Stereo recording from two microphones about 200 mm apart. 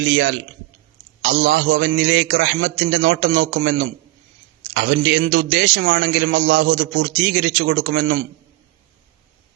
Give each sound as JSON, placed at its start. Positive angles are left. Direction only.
{"t": 0.0, "sound": "a man's voice", "side_deg": -60}